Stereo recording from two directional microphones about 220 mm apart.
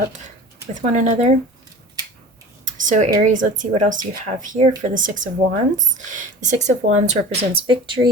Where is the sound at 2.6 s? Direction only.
35° right (ahead or behind).